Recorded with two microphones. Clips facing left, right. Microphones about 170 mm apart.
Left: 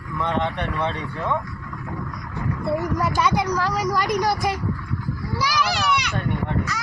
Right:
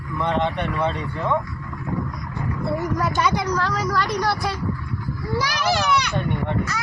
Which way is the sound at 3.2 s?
5° left (ahead or behind).